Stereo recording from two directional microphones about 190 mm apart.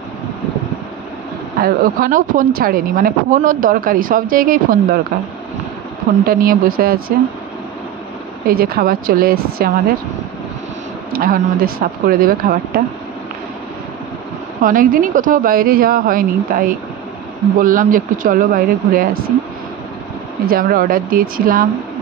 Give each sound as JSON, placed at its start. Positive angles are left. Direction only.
{"t": 1.6, "sound": "speech", "side_deg": -45}
{"t": 6.2, "sound": "speech", "side_deg": -50}
{"t": 8.5, "sound": "speech", "side_deg": -50}
{"t": 11.1, "sound": "speech", "side_deg": -50}
{"t": 14.6, "sound": "speech", "side_deg": -45}
{"t": 20.4, "sound": "speech", "side_deg": -50}